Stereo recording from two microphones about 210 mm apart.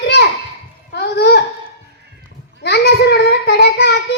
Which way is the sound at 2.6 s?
50° left (ahead or behind).